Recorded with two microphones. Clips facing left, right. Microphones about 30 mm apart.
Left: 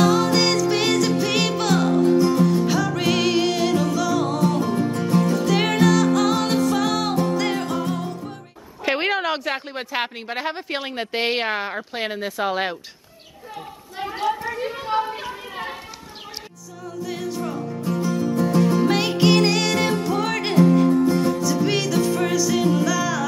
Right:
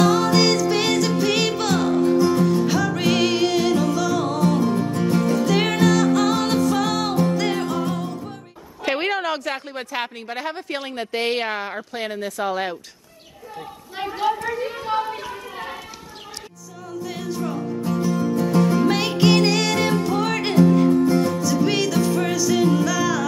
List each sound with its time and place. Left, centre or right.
0.0 s music: centre
8.8 s a woman's voice: centre
14.3 s a sound: centre
17.2 s music: centre
18.6 s music: centre